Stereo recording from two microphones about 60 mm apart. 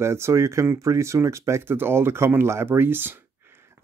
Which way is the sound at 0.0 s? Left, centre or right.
Right.